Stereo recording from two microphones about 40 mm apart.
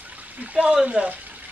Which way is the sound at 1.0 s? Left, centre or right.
Right.